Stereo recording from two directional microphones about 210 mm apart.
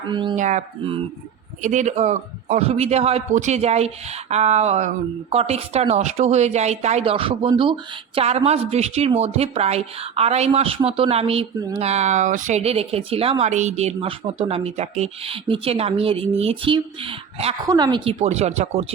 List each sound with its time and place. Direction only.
0.1 s a woman's voice: 20° right (ahead or behind)
0.3 s a man's voice: 35° right (ahead or behind)